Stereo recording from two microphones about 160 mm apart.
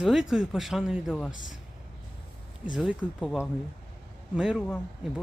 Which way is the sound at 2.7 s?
5° right (ahead or behind).